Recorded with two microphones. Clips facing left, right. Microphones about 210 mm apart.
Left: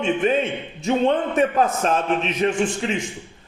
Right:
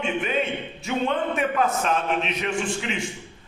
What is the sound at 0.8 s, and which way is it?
A man's voice, 40° left (ahead or behind).